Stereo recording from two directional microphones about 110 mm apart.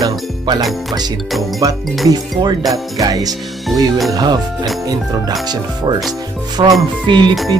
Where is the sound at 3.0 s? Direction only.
35° right (ahead or behind).